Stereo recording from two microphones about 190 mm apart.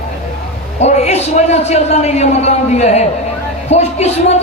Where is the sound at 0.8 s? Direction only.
35° left (ahead or behind).